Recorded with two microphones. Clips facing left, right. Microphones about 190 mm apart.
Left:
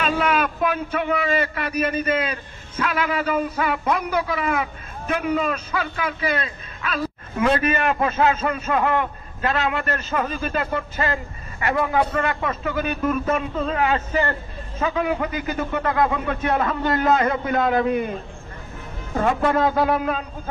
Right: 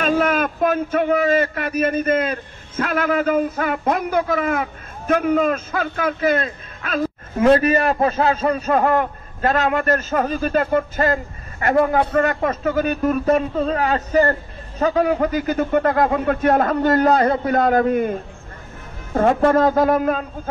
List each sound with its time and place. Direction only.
0.0 s a man's voice: 45° right (ahead or behind)
19.1 s a man's voice: 45° right (ahead or behind)